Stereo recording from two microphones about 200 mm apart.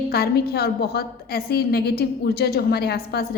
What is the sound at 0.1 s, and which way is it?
A woman's voice, 50° left (ahead or behind).